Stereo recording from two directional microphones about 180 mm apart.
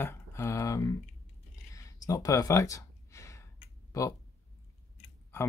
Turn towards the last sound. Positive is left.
turn(degrees=20)  # may be behind; listen again after turning